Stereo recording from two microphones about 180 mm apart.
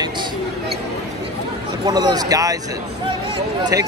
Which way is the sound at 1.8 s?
20° right (ahead or behind).